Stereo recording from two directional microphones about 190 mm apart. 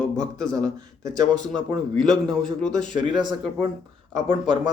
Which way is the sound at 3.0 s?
25° right (ahead or behind).